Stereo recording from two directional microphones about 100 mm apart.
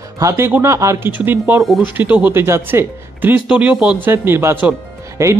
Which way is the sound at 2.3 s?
25° right (ahead or behind).